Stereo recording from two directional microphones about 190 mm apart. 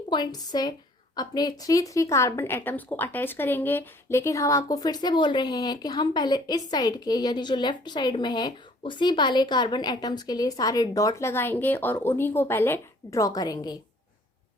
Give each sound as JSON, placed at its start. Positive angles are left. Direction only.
{"t": 0.1, "sound": "a woman's voice", "side_deg": 20}